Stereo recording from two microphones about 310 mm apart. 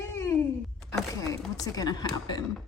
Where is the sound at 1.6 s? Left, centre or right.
Centre.